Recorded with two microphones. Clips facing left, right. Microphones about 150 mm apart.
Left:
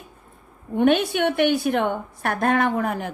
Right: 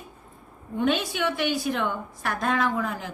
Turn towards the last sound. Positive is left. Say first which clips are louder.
# left 4 dB
turn(degrees=60)  # may be behind; listen again after turning